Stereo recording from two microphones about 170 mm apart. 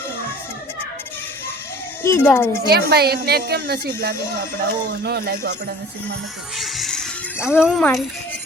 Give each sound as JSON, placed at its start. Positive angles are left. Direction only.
{"t": 2.0, "sound": "speech", "side_deg": 10}
{"t": 2.6, "sound": "speech", "side_deg": -70}
{"t": 6.6, "sound": "music", "side_deg": 0}
{"t": 7.6, "sound": "speech", "side_deg": 0}